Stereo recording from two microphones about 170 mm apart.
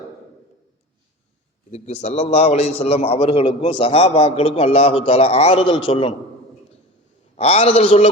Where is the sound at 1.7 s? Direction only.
40° left (ahead or behind).